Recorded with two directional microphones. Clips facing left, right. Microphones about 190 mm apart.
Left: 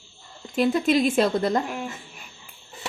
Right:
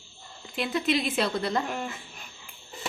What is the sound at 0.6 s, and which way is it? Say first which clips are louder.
Speech: left 7 dB; 45° left (ahead or behind).